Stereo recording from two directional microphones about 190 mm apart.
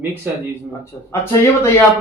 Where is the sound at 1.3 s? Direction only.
15° left (ahead or behind).